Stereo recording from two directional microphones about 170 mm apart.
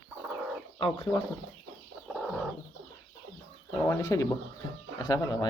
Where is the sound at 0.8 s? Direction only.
30° left (ahead or behind).